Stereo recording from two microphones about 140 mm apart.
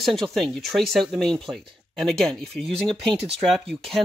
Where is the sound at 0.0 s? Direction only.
Centre (ahead or behind).